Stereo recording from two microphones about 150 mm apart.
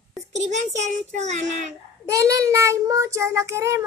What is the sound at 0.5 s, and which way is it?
A child's voice, 50° right (ahead or behind).